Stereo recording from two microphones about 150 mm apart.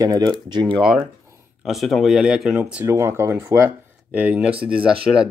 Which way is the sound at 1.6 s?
Centre (ahead or behind).